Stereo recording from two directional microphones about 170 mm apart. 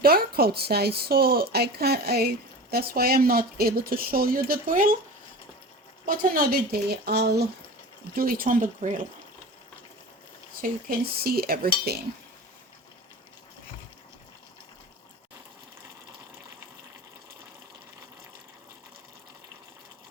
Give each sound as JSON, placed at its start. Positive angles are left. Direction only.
{"t": 0.0, "sound": "a woman's voice", "side_deg": -65}
{"t": 6.1, "sound": "speech", "side_deg": -55}
{"t": 8.1, "sound": "speech", "side_deg": -60}
{"t": 10.6, "sound": "a woman's voice", "side_deg": -60}